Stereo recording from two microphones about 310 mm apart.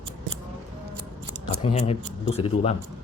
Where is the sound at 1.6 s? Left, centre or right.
Centre.